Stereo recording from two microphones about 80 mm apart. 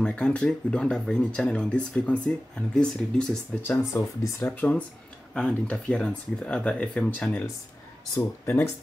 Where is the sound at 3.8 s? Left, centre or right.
Left.